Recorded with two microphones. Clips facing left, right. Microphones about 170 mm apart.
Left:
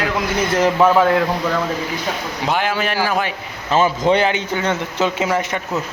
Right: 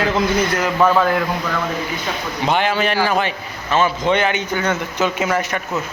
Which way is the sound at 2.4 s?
5° left (ahead or behind).